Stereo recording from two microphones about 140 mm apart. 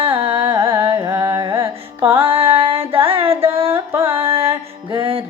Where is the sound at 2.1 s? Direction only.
40° right (ahead or behind).